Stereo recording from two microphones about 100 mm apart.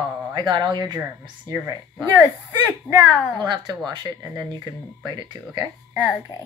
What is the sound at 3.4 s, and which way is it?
Speech, 45° right (ahead or behind).